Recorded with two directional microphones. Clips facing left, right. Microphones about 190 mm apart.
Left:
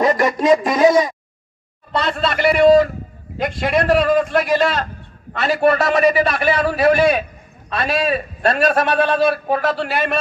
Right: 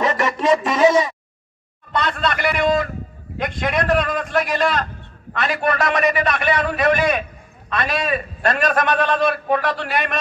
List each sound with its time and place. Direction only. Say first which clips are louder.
0.0 s a man's voice: left 4 dB; 35° left (ahead or behind)